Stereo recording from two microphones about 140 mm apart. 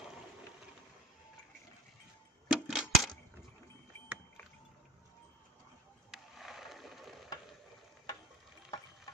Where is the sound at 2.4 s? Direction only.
5° right (ahead or behind).